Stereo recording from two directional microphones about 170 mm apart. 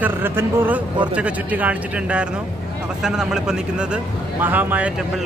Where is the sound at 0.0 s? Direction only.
10° right (ahead or behind).